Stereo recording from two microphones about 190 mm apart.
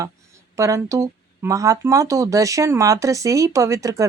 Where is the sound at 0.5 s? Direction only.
15° right (ahead or behind).